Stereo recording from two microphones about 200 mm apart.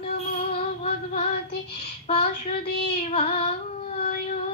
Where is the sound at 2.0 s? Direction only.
30° left (ahead or behind).